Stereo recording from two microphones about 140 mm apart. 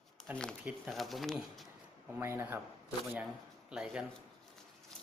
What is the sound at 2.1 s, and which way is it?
Speech, 15° right (ahead or behind).